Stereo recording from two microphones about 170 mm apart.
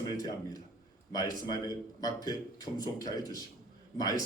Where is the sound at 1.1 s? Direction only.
20° left (ahead or behind).